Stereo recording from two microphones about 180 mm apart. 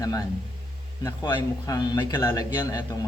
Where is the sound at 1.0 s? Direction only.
20° left (ahead or behind).